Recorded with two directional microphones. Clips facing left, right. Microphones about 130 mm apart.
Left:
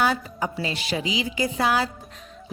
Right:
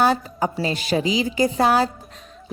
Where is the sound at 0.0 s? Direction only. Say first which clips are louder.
Right 4 dB; 40° right (ahead or behind).